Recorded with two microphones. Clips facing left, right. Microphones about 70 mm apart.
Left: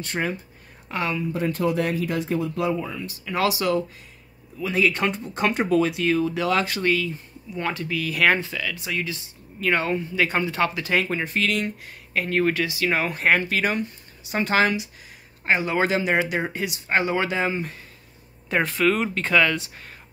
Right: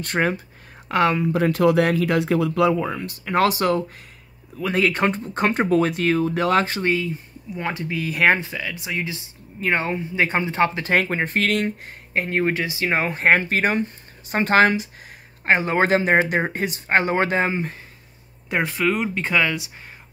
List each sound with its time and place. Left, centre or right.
0.0 s speech: right
6.7 s speech: right
17.5 s speech: right
18.5 s speech: centre